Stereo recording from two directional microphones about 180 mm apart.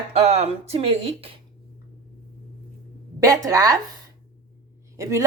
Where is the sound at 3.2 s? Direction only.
20° right (ahead or behind).